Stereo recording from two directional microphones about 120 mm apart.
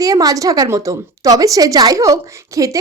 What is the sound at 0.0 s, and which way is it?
Speech, 30° right (ahead or behind).